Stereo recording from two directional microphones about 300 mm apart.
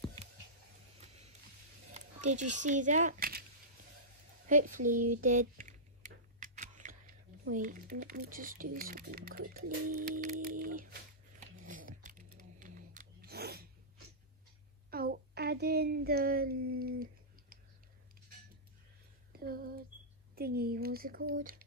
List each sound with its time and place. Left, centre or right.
1.0 s music: right
2.0 s speech: right
4.5 s speech: right
5.2 s typing: right
9.9 s speech: right
10.6 s a sound: right
14.9 s child singing: right
19.4 s a sound: right
20.3 s speech: right